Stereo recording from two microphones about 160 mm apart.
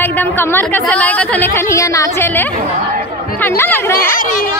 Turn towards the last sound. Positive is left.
turn(degrees=60)  # may be behind; listen again after turning